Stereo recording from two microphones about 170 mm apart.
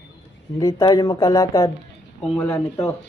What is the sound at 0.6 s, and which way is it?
Speech, 20° left (ahead or behind).